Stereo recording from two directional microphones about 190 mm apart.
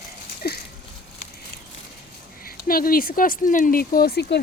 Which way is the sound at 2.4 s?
50° left (ahead or behind).